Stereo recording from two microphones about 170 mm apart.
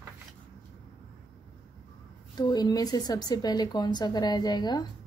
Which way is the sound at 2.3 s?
25° left (ahead or behind).